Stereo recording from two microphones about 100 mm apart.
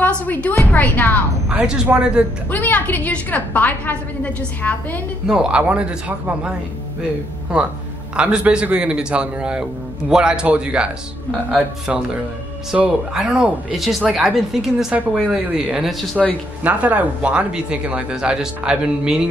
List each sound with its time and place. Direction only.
0.0 s a woman's voice: 15° left (ahead or behind)
1.5 s speech: 10° right (ahead or behind)
2.5 s a woman's voice: 15° left (ahead or behind)
5.2 s speech: 5° right (ahead or behind)
8.2 s speech: 10° right (ahead or behind)
11.9 s speech: 10° right (ahead or behind)